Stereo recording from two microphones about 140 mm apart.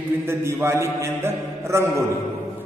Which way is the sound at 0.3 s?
20° right (ahead or behind).